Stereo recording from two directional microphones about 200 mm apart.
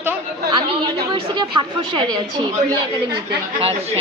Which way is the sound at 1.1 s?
25° right (ahead or behind).